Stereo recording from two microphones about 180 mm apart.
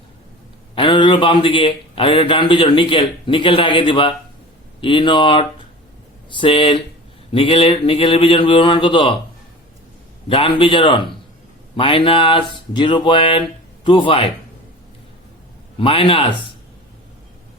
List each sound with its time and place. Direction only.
0.8 s a man's voice: 25° left (ahead or behind)
10.2 s a man's voice: 30° left (ahead or behind)
15.8 s a man's voice: 30° left (ahead or behind)